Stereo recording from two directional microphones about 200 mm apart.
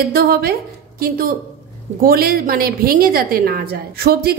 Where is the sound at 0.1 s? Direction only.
50° right (ahead or behind).